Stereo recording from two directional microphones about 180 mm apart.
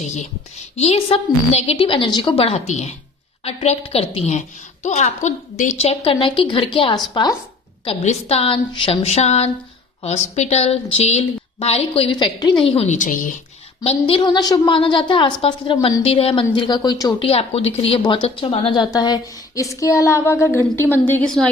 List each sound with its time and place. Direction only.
0.0 s a woman's voice: 40° left (ahead or behind)
13.8 s a woman's voice: 30° left (ahead or behind); by 21.5 s 5° left (ahead or behind)